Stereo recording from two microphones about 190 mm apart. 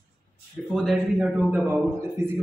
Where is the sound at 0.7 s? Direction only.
Centre (ahead or behind).